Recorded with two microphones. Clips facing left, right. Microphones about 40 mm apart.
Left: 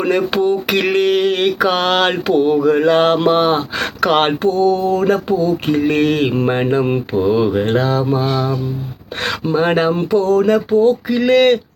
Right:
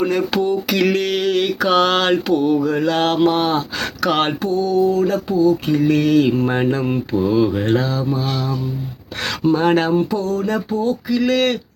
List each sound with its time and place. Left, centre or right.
0.0 s speech: left
2.9 s mantra: centre
3.8 s speech: left
9.4 s mantra: centre
9.9 s speech: left